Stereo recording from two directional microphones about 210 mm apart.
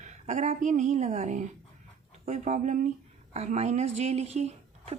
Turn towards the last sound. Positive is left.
turn(degrees=-30)  # may be behind; listen again after turning